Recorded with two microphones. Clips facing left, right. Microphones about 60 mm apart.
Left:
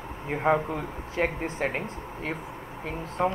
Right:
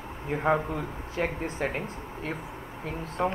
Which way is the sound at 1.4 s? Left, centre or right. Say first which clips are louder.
Left 1 dB; left.